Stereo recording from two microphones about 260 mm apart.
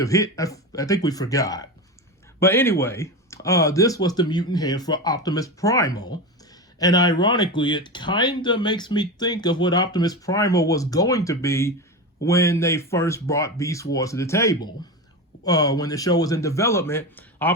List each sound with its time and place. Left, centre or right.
0.0 s speech: centre